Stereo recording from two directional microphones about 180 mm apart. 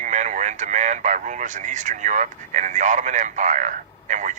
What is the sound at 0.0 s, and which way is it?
Speech, 40° right (ahead or behind).